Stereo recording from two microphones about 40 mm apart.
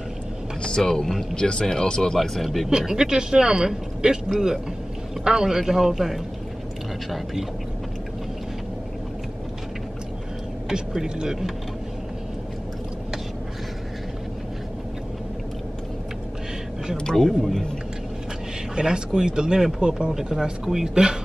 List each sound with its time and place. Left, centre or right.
0.6 s vehicle: left
0.8 s speech: centre
2.1 s speech: centre
2.8 s speech: centre
5.2 s speech: centre
10.7 s speech: centre
17.1 s speech: centre
18.8 s speech: centre